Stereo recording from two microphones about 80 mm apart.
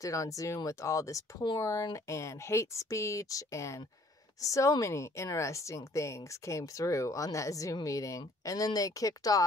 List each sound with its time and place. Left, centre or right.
0.0 s speech: left